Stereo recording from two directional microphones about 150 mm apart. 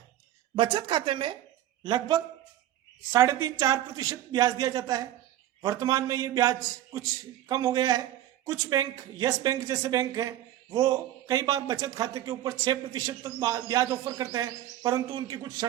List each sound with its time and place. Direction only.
0.5 s a woman's voice: 35° right (ahead or behind)